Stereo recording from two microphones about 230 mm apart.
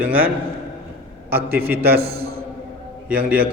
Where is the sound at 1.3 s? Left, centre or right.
Right.